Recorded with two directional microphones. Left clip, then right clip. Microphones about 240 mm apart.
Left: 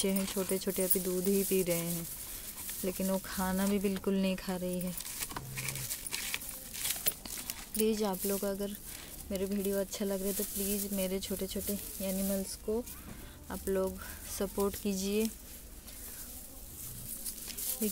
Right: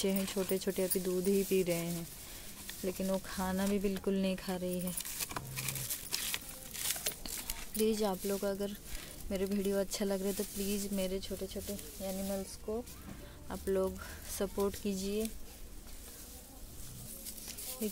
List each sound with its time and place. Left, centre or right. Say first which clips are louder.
0.0 s speech: left 1 dB; centre
5.2 s a sound: left 1 dB; centre
9.3 s speech: even; centre
11.1 s speech: left 2 dB; centre
13.5 s speech: even; centre